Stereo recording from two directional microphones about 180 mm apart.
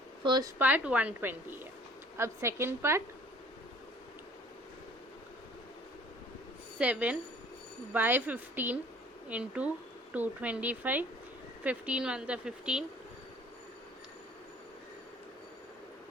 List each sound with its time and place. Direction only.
0.3 s speech: 25° right (ahead or behind)
0.6 s a woman's voice: 10° right (ahead or behind)
6.7 s a woman's voice: 5° right (ahead or behind)